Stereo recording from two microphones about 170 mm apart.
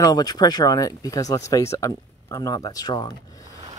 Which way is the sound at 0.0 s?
25° left (ahead or behind).